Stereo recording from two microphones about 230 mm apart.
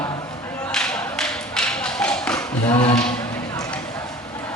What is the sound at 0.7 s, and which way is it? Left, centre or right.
Thump, centre.